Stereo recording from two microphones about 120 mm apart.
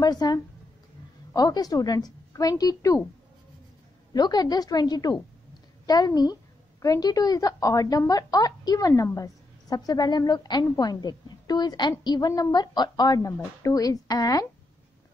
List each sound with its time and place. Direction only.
0.0 s a woman's voice: 35° left (ahead or behind)
4.1 s a woman's voice: 35° left (ahead or behind)